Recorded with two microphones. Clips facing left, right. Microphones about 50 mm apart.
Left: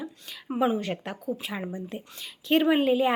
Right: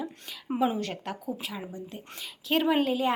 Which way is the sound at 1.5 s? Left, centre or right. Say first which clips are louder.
Left 5 dB; left.